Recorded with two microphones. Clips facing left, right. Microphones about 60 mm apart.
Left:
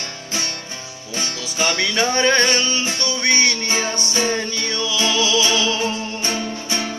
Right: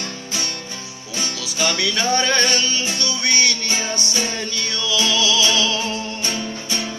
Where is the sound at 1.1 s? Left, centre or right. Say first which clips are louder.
Left 1 dB; left.